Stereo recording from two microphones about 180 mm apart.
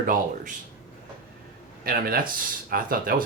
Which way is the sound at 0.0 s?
50° right (ahead or behind).